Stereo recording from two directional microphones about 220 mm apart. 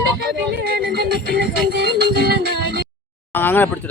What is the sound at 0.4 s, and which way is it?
Music, 45° right (ahead or behind).